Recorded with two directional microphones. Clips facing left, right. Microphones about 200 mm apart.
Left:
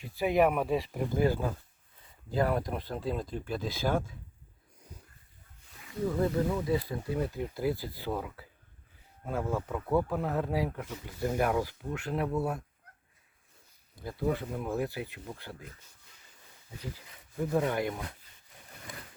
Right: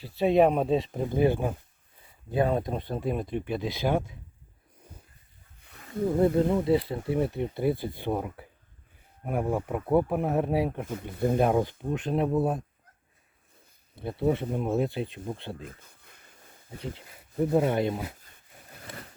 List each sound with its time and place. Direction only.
0.0 s speech: 25° right (ahead or behind)
5.6 s wild animals: 50° right (ahead or behind)
6.7 s speech: 25° right (ahead or behind)
11.1 s speech: 55° right (ahead or behind)
11.6 s speech: 20° right (ahead or behind)
13.9 s speech: 25° right (ahead or behind)
15.6 s a sound: 55° right (ahead or behind)
16.8 s speech: 30° right (ahead or behind)